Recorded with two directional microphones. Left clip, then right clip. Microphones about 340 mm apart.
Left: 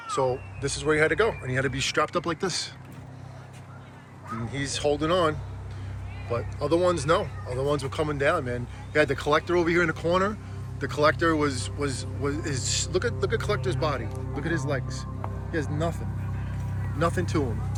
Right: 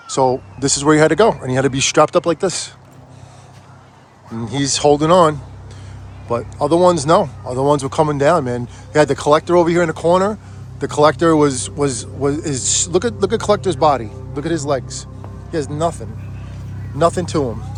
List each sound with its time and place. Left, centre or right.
0.1 s speech: centre
4.5 s speech: centre
6.3 s speech: centre
17.0 s speech: centre